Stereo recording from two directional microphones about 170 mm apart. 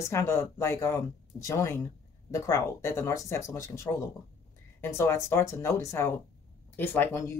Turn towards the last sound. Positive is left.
turn(degrees=15)  # may be behind; listen again after turning